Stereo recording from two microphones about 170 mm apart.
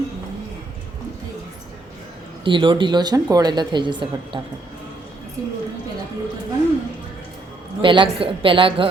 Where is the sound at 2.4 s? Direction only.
30° right (ahead or behind).